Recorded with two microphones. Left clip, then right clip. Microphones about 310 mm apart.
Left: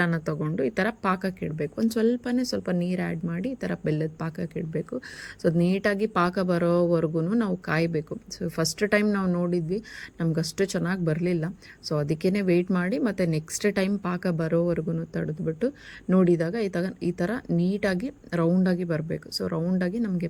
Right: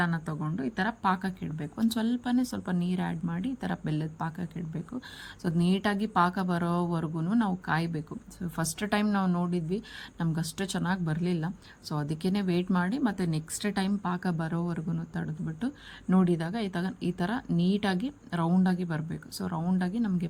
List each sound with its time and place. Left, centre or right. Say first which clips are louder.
0.0 s speech: left 5 dB; centre